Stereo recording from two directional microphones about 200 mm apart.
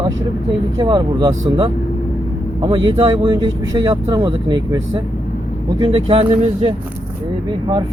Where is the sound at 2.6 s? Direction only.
25° right (ahead or behind).